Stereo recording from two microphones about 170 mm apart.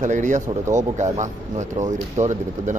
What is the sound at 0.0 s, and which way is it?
Speech, 45° right (ahead or behind).